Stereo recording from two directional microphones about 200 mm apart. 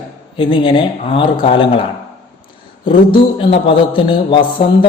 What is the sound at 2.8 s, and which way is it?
A man's voice, 25° left (ahead or behind).